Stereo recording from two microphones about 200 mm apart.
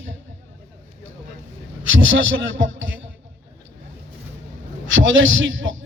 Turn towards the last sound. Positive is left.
turn(degrees=-70)  # may be behind; listen again after turning